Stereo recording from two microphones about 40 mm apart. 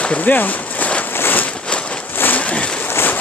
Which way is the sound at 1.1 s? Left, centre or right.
Left.